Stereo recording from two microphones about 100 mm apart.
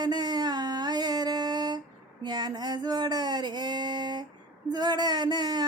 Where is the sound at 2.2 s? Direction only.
45° right (ahead or behind).